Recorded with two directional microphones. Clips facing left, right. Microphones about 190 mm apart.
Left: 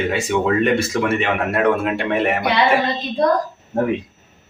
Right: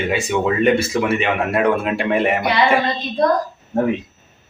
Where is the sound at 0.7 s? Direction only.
Centre (ahead or behind).